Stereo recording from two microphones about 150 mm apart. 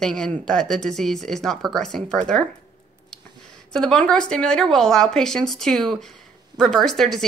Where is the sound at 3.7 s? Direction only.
5° left (ahead or behind).